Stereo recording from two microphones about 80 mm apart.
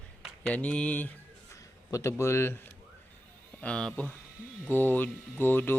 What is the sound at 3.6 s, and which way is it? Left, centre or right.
Speech, centre.